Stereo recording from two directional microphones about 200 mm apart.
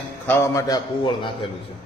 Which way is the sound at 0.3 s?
15° left (ahead or behind).